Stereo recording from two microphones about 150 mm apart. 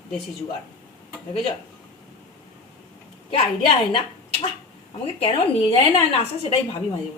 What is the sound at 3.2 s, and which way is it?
A woman's voice, 35° left (ahead or behind).